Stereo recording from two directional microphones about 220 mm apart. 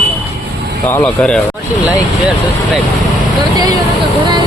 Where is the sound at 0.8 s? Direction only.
5° left (ahead or behind).